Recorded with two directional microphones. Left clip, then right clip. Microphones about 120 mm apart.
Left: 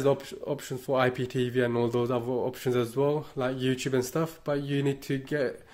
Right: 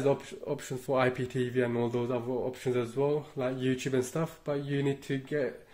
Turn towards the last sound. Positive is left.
turn(degrees=60)  # may be behind; listen again after turning